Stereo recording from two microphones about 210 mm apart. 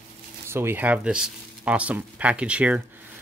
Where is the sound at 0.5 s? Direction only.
10° right (ahead or behind).